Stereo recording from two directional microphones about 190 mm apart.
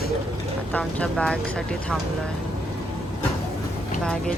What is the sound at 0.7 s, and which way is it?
Speech, 5° left (ahead or behind).